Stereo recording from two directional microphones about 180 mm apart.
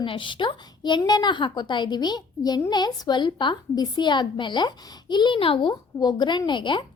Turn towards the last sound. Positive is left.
turn(degrees=25)  # may be behind; listen again after turning